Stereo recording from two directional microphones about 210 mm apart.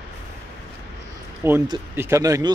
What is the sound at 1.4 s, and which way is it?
Speech, 10° right (ahead or behind).